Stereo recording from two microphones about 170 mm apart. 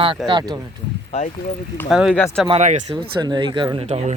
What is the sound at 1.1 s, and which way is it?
Speech, 40° left (ahead or behind).